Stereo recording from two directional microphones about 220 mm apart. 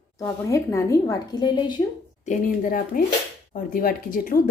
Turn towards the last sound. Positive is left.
turn(degrees=40)  # may be behind; listen again after turning